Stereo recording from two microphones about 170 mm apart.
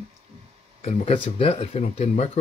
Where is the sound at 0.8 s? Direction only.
35° left (ahead or behind).